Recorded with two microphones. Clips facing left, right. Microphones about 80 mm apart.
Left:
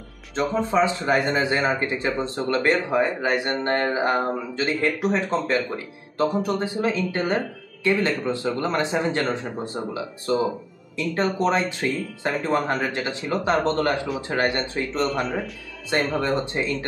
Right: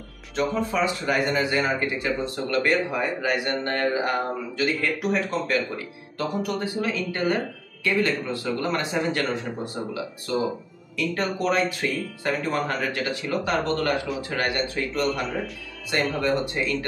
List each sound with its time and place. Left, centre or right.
0.4 s speech: left